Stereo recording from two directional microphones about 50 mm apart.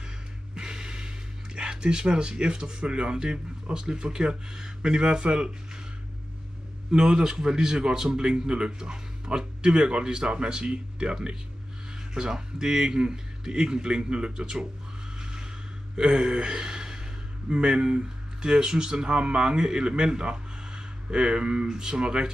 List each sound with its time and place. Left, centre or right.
0.6 s speech: centre
6.9 s speech: centre
15.1 s a sound: centre
16.0 s a man's voice: centre